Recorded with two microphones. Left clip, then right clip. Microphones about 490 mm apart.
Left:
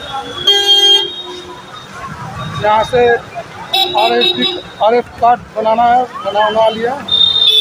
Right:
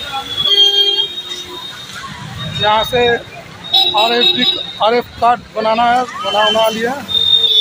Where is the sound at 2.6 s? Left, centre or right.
Right.